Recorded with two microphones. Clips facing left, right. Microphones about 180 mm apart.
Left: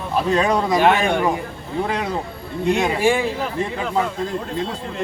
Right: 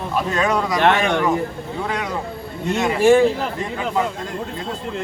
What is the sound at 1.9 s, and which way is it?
Speech, 30° left (ahead or behind).